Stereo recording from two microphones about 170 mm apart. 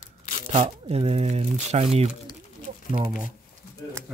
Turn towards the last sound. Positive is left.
turn(degrees=-35)  # may be behind; listen again after turning